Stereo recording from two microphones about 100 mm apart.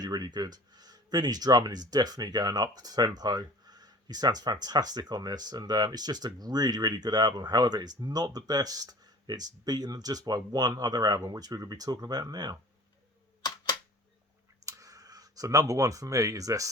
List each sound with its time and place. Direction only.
0.0 s speech: 45° right (ahead or behind)
14.6 s speech: 35° right (ahead or behind)